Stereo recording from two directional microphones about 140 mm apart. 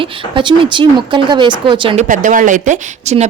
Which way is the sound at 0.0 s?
35° right (ahead or behind).